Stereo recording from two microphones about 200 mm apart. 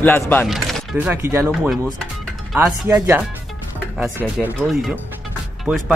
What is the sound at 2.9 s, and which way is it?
Speech, 15° right (ahead or behind).